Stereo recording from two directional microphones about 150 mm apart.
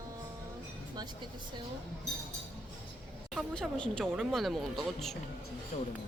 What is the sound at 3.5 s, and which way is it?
Speech, 5° left (ahead or behind).